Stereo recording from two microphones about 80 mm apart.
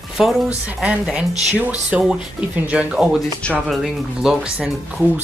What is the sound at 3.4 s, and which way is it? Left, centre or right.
Speech, centre.